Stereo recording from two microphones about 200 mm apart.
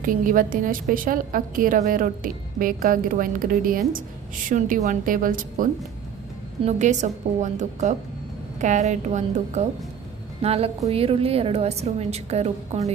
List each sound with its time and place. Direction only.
0.0 s a woman's voice: 40° right (ahead or behind)
6.7 s a woman's voice: 35° right (ahead or behind)